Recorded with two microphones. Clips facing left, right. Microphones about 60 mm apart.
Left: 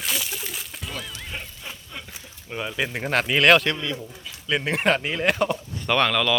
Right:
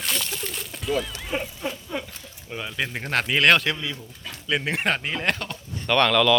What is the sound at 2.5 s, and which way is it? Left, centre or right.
Speech, centre.